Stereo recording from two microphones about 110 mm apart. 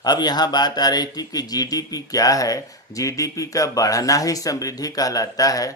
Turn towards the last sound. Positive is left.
turn(degrees=30)  # may be behind; listen again after turning